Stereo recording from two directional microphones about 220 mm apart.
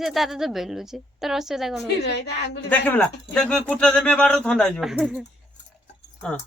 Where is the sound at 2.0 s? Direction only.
50° left (ahead or behind).